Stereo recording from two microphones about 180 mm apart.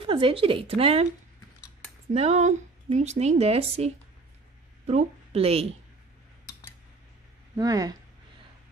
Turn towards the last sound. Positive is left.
turn(degrees=-20)  # may be behind; listen again after turning